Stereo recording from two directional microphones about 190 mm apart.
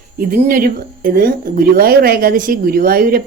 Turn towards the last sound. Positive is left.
turn(degrees=-50)  # may be behind; listen again after turning